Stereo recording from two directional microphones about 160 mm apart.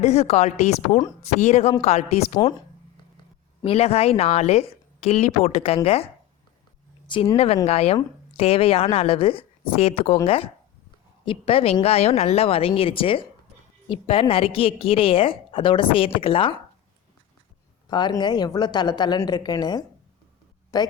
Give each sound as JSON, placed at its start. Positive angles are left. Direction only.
{"t": 0.0, "sound": "a woman's voice", "side_deg": 40}
{"t": 3.6, "sound": "a woman's voice", "side_deg": 35}
{"t": 7.3, "sound": "a woman's voice", "side_deg": 35}
{"t": 17.8, "sound": "a woman's voice", "side_deg": 25}